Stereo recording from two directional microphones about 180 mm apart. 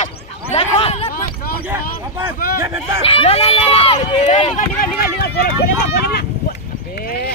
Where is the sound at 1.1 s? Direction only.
55° left (ahead or behind).